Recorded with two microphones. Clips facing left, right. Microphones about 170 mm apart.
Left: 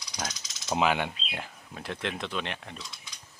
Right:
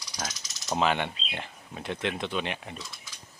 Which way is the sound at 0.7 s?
5° left (ahead or behind).